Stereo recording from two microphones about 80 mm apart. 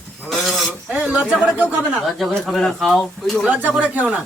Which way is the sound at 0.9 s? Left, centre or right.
Centre.